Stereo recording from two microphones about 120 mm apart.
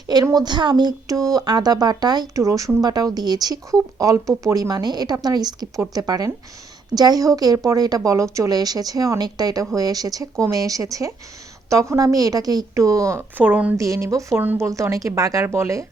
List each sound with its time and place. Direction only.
0.1 s a woman's voice: 35° right (ahead or behind); by 13.7 s 15° right (ahead or behind)
13.7 s a woman's voice: 25° right (ahead or behind)